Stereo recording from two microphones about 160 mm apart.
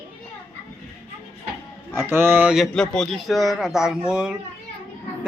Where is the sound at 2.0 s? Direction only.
15° right (ahead or behind).